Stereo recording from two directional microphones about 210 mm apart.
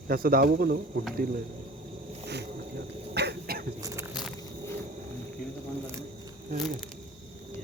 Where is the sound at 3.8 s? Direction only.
15° right (ahead or behind).